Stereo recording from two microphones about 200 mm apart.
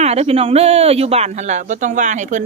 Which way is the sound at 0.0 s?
30° right (ahead or behind).